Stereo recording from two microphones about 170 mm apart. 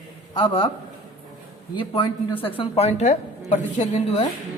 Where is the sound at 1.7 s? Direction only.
30° left (ahead or behind).